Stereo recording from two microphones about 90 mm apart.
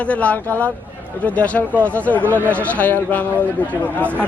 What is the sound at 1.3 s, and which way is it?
Speech, 15° left (ahead or behind).